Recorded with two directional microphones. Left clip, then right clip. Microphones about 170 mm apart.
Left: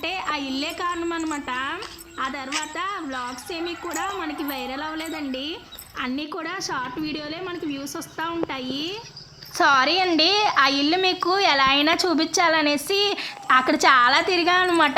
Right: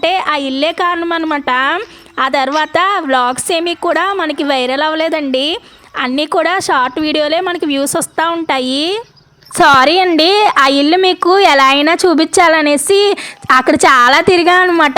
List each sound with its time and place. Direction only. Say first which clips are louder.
0.0 s a woman's voice: right 13 dB; 60° right (ahead or behind)
9.6 s a woman's voice: right 11 dB; 45° right (ahead or behind)